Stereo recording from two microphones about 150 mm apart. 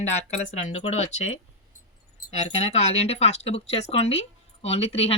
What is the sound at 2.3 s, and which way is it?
Speech, 45° left (ahead or behind).